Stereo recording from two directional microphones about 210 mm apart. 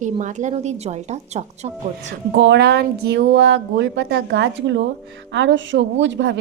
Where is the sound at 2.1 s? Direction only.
55° right (ahead or behind).